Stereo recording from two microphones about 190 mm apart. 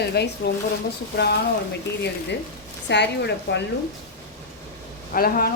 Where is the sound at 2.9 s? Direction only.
65° left (ahead or behind).